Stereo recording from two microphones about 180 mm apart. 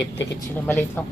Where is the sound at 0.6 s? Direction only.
10° left (ahead or behind).